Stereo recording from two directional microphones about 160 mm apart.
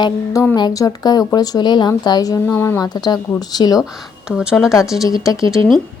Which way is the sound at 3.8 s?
Centre (ahead or behind).